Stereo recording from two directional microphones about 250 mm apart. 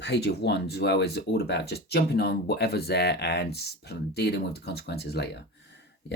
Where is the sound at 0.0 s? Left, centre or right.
Left.